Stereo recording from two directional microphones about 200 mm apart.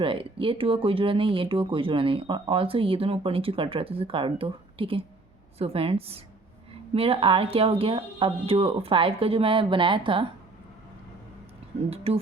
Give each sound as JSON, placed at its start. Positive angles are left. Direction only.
{"t": 0.0, "sound": "speech", "side_deg": -25}
{"t": 11.9, "sound": "speech", "side_deg": -30}